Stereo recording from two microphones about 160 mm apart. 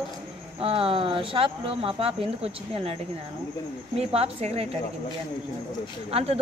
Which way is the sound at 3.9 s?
40° right (ahead or behind).